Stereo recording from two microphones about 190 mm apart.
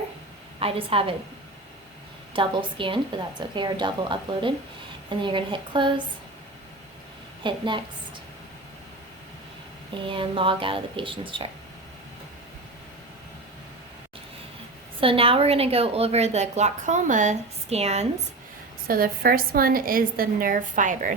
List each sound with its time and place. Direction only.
0.6 s a woman's voice: 30° right (ahead or behind)
2.3 s a woman's voice: 25° right (ahead or behind)
7.4 s a woman's voice: 25° right (ahead or behind)
9.9 s a woman's voice: 25° right (ahead or behind)
15.0 s a woman's voice: 30° right (ahead or behind)
18.9 s a woman's voice: 50° right (ahead or behind)